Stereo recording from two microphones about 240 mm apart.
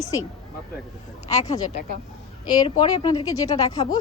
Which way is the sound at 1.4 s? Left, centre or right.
Centre.